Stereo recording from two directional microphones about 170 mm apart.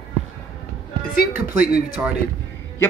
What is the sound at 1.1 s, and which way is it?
Speech, 60° left (ahead or behind).